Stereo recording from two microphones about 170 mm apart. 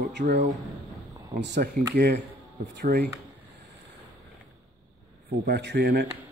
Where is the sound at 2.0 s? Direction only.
75° right (ahead or behind).